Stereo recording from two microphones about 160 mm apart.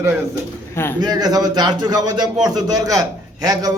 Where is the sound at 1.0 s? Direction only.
25° right (ahead or behind).